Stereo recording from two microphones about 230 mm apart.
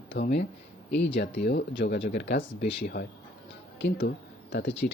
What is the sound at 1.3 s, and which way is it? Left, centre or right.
Speech, left.